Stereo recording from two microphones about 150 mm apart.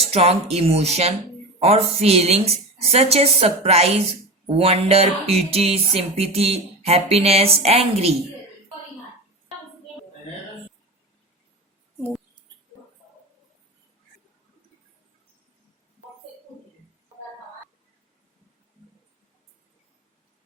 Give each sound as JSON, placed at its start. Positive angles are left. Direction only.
{"t": 0.1, "sound": "a woman's voice", "side_deg": -45}